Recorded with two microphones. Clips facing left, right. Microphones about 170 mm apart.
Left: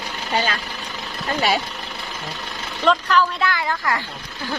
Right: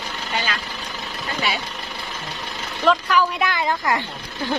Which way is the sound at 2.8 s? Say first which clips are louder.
Even; 5° right (ahead or behind).